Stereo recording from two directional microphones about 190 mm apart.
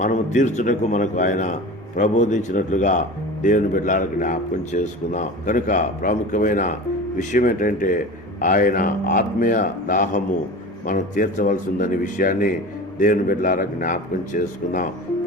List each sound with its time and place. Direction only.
0.0 s a man's voice: 40° left (ahead or behind)